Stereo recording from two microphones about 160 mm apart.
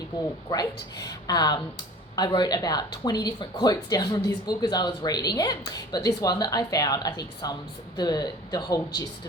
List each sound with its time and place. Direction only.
0.5 s speech: 25° left (ahead or behind)